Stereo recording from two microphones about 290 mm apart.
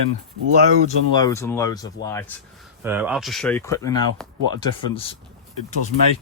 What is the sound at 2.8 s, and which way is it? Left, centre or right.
Speech, centre.